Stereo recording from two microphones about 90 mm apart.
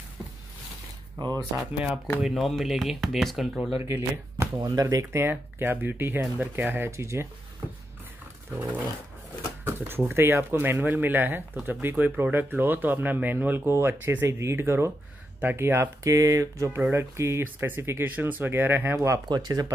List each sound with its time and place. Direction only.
1.2 s speech: 60° right (ahead or behind)
1.6 s speech: 15° right (ahead or behind)
2.2 s speech: centre (ahead or behind)
3.8 s speech: 30° right (ahead or behind)
4.6 s speech: 40° right (ahead or behind)
5.2 s speech: 25° right (ahead or behind)
6.7 s speech: 25° right (ahead or behind)
9.7 s speech: 25° right (ahead or behind)
16.0 s speech: 35° right (ahead or behind)
17.4 s speech: 25° right (ahead or behind)
19.2 s speech: 50° right (ahead or behind)